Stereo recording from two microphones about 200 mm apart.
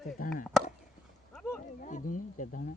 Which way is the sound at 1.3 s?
5° left (ahead or behind).